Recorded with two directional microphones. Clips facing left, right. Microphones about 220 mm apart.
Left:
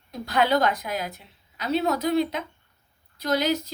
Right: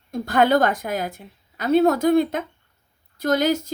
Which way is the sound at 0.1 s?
50° right (ahead or behind).